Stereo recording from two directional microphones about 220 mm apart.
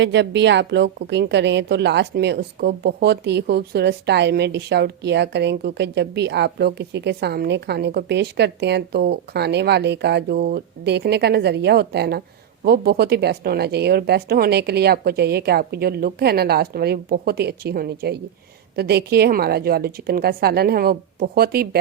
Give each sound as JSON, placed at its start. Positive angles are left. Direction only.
{"t": 0.0, "sound": "a woman's voice", "side_deg": -55}